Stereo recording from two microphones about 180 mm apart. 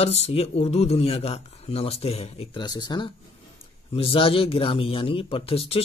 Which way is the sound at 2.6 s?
20° left (ahead or behind).